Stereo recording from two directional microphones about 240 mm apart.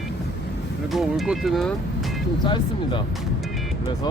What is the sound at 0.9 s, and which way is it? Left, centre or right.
Speech, centre.